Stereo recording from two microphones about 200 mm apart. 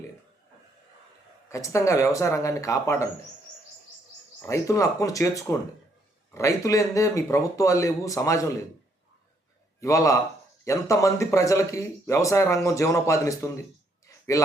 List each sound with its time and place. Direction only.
1.5 s speech: 15° left (ahead or behind)
4.4 s speech: 15° left (ahead or behind)
9.8 s speech: 15° left (ahead or behind)